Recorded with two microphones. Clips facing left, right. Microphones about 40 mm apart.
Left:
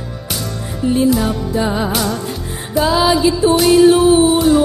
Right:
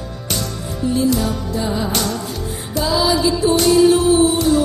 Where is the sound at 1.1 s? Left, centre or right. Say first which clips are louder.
Left 3 dB; centre.